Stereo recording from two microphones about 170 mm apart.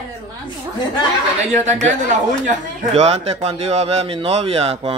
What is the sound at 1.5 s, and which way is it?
A man's voice, 45° right (ahead or behind).